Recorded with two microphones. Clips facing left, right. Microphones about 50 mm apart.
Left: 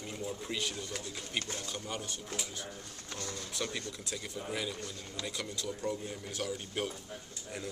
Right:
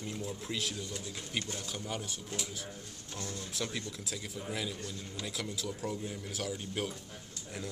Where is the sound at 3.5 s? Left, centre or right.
Centre.